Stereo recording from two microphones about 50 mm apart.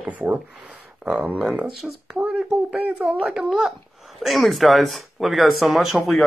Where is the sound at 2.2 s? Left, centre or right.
Right.